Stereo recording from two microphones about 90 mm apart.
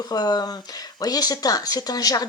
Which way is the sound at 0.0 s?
45° left (ahead or behind).